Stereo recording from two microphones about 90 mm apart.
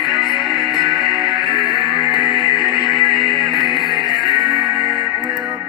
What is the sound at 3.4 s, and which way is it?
Music, centre (ahead or behind).